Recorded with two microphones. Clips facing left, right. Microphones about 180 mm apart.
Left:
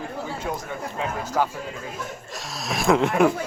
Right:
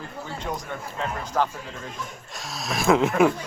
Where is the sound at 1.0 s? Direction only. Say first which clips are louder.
Left 1 dB; 5° left (ahead or behind).